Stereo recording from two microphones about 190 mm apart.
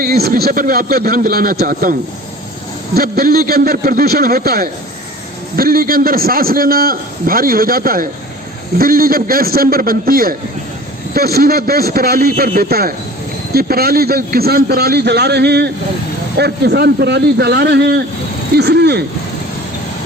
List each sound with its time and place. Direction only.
0.0 s a man's voice: 55° right (ahead or behind)